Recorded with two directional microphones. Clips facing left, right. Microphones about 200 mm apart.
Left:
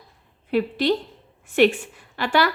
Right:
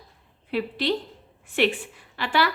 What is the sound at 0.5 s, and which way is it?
A woman's voice, 45° left (ahead or behind).